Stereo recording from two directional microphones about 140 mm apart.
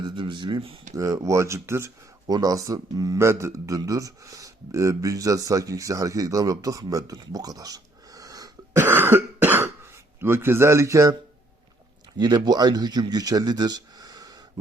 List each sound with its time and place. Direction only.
0.0 s speech: 35° right (ahead or behind)
0.9 s speech: 25° right (ahead or behind)
8.8 s speech: 15° right (ahead or behind)
12.2 s speech: 30° right (ahead or behind)